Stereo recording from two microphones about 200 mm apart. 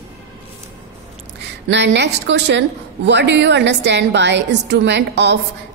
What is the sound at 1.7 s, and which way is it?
A woman's voice, 60° right (ahead or behind).